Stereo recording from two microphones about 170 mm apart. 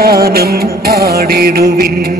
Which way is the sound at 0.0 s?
65° right (ahead or behind).